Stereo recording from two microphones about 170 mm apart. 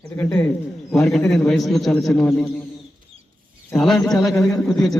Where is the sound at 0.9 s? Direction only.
Centre (ahead or behind).